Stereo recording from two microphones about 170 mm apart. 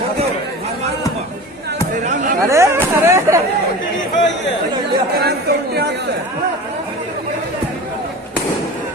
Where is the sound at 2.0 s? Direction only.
45° right (ahead or behind).